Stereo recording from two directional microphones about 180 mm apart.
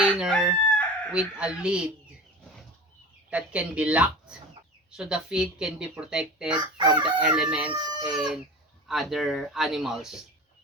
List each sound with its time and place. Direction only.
0.0 s chicken: centre (ahead or behind)
3.2 s speech: 5° right (ahead or behind)
6.7 s chicken: 25° right (ahead or behind)
7.2 s speech: 5° right (ahead or behind)